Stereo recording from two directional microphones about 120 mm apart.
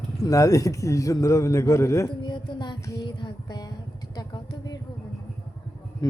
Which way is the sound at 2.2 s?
40° left (ahead or behind).